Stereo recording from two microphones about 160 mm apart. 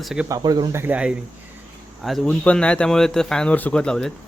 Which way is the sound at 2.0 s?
Centre (ahead or behind).